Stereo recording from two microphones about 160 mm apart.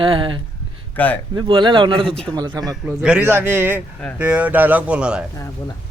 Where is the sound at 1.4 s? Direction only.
30° right (ahead or behind).